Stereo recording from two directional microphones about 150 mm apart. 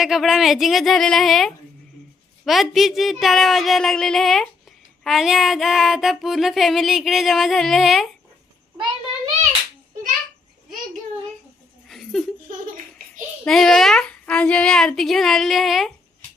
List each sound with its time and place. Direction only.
0.0 s child singing: 5° right (ahead or behind)
11.9 s laughter: centre (ahead or behind)
12.5 s laughter: 60° right (ahead or behind)
13.4 s child singing: centre (ahead or behind)